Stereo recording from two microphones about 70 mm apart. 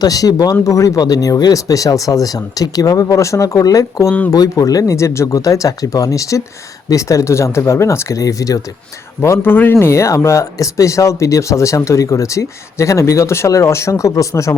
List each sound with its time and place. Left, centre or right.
0.0 s speech: left
0.6 s speech: left
9.2 s speech: left